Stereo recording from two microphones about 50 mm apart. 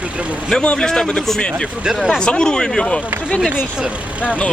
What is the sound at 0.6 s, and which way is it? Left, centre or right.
Speech, left.